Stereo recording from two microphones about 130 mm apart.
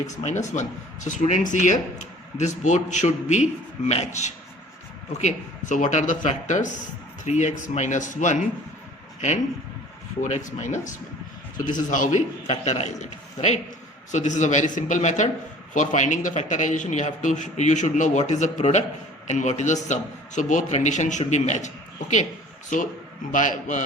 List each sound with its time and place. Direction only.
0.2 s a man's voice: 65° left (ahead or behind)
10.2 s a man's voice: 70° left (ahead or behind)
11.5 s a man's voice: 85° left; by 21.7 s 65° left (ahead or behind)
23.3 s a man's voice: 85° left